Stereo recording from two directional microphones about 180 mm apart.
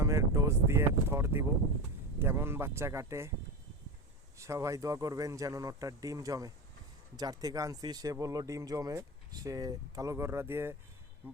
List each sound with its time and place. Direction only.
0.0 s speech: 15° right (ahead or behind)
4.4 s speech: 15° right (ahead or behind)